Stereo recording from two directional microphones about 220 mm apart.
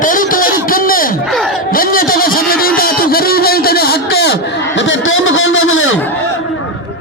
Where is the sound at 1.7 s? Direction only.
40° left (ahead or behind); by 5.9 s 65° left (ahead or behind).